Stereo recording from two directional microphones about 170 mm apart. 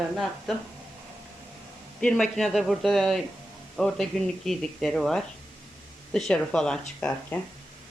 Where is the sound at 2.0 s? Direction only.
5° left (ahead or behind).